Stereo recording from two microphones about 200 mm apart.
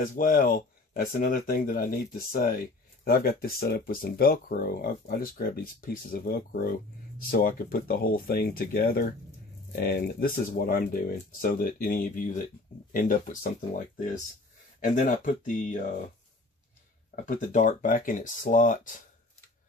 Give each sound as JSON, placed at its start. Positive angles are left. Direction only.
{"t": 0.0, "sound": "speech", "side_deg": 45}
{"t": 14.8, "sound": "speech", "side_deg": 40}
{"t": 17.1, "sound": "speech", "side_deg": 40}